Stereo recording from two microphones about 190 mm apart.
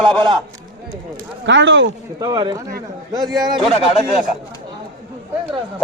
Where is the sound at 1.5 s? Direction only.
75° right (ahead or behind).